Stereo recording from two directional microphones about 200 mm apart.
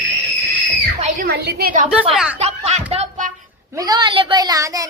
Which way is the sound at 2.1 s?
5° right (ahead or behind).